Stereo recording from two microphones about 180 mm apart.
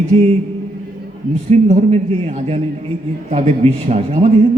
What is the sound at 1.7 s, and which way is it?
A man's voice, 35° right (ahead or behind).